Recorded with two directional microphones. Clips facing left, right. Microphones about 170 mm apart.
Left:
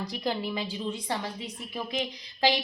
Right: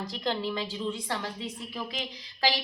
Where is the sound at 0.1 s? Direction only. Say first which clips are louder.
Right 2 dB; 10° left (ahead or behind).